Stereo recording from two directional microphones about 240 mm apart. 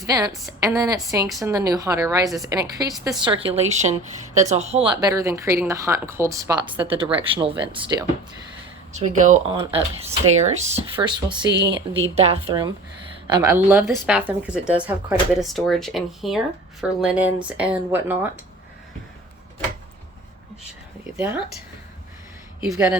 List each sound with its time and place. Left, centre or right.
0.0 s speech: centre
8.9 s speech: right
11.5 s speech: right
12.0 s speech: right; by 18.3 s centre
22.6 s speech: centre